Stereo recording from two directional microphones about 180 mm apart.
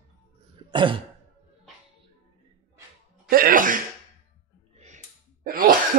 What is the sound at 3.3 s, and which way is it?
Sneeze, 50° right (ahead or behind).